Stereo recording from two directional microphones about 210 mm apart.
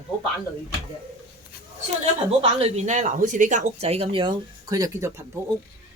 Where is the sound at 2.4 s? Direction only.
30° right (ahead or behind).